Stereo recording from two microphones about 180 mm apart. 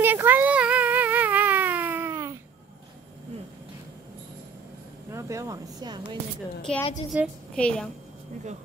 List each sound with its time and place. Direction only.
0.0 s a sound: 10° right (ahead or behind)
5.1 s speech: 15° right (ahead or behind)
6.7 s a woman's voice: 5° left (ahead or behind)
7.1 s speech: 10° right (ahead or behind)
7.5 s a woman's voice: 5° left (ahead or behind)